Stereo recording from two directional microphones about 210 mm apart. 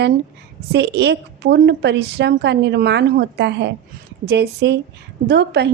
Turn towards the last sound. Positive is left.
turn(degrees=-55)  # may be behind; listen again after turning